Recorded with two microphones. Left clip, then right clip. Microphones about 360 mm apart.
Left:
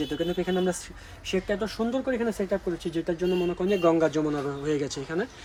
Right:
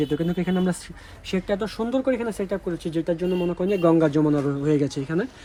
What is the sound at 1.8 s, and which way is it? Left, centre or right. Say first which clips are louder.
Speech: right 1 dB; right.